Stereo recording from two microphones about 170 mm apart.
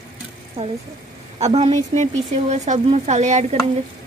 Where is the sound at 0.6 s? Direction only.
35° right (ahead or behind).